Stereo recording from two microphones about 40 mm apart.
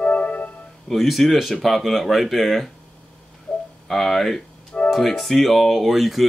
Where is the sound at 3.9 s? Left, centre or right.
Centre.